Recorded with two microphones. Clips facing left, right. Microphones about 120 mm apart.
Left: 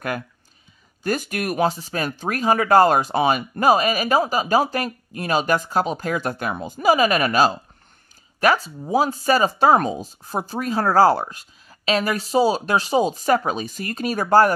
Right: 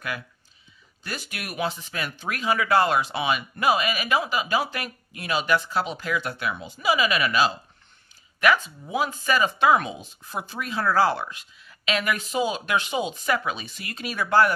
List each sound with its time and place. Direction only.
1.0 s speech: 45° left (ahead or behind)